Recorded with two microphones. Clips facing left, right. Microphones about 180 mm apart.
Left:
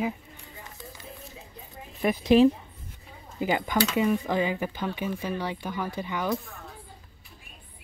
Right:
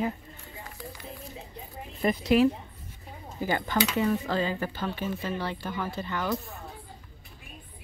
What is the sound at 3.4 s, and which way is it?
Speech, 15° left (ahead or behind).